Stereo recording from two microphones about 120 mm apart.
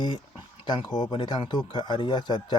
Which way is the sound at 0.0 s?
40° left (ahead or behind).